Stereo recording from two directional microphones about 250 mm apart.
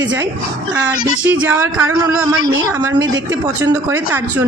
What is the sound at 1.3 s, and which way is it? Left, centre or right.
Speech, centre.